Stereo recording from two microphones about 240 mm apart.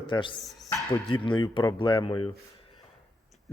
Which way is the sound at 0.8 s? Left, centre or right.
Centre.